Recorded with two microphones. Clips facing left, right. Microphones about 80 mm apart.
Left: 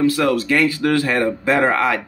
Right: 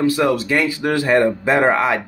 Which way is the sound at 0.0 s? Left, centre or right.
Centre.